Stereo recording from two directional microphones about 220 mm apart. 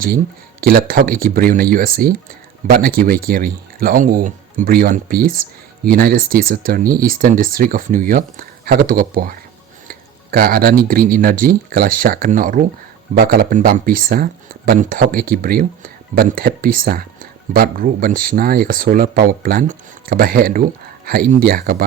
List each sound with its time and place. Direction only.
0.6 s speech: 40° right (ahead or behind)